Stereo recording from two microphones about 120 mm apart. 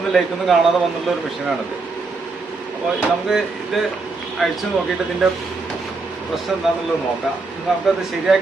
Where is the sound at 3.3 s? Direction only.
Centre (ahead or behind).